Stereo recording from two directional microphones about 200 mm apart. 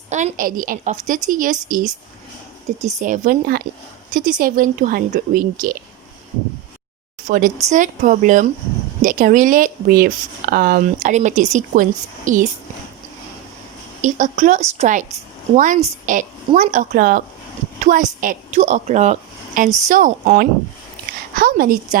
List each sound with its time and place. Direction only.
0.1 s speech: 35° right (ahead or behind)
2.8 s a woman's voice: 40° right (ahead or behind)
7.3 s speech: 40° right (ahead or behind)
14.0 s a woman's voice: 40° right (ahead or behind)